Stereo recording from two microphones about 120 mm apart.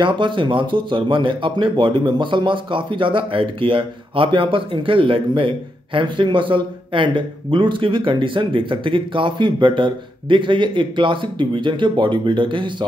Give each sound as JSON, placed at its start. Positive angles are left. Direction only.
{"t": 0.0, "sound": "a man's voice", "side_deg": -40}